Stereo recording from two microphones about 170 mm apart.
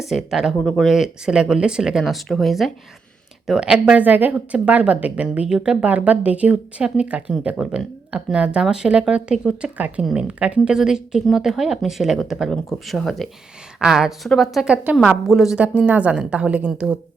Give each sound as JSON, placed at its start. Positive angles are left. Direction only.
{"t": 0.0, "sound": "speech", "side_deg": 0}